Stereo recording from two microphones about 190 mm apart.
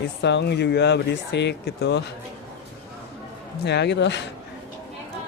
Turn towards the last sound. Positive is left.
turn(degrees=65)  # may be behind; listen again after turning